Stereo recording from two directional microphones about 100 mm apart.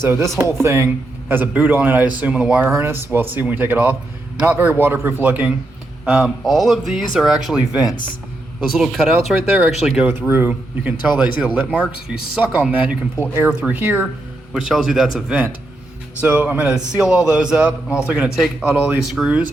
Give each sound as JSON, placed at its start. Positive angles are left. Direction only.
{"t": 0.0, "sound": "a man's voice", "side_deg": -25}
{"t": 2.6, "sound": "a man's voice", "side_deg": -25}
{"t": 10.1, "sound": "speech", "side_deg": -20}
{"t": 12.0, "sound": "a man's voice", "side_deg": -10}
{"t": 14.5, "sound": "a man's voice", "side_deg": -5}